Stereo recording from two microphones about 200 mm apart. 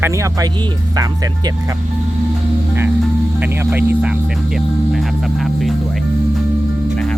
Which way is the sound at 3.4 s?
10° right (ahead or behind).